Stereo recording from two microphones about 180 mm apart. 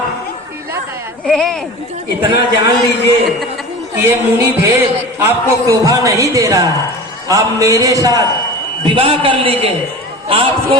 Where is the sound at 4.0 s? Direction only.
15° right (ahead or behind).